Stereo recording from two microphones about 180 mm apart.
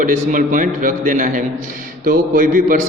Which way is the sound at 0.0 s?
45° right (ahead or behind).